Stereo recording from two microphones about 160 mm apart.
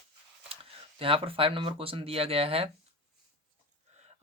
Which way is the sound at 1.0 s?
35° right (ahead or behind).